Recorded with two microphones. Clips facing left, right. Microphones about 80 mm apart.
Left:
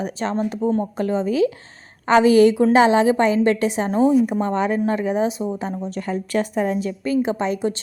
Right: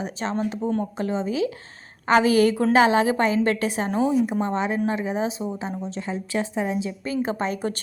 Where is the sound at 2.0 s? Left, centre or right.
Left.